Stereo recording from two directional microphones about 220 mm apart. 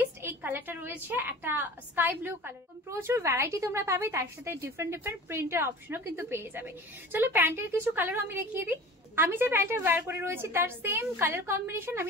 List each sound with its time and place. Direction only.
0.0 s a woman's voice: 10° right (ahead or behind)